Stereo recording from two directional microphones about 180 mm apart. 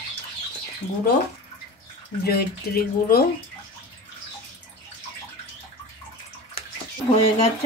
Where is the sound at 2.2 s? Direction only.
60° left (ahead or behind).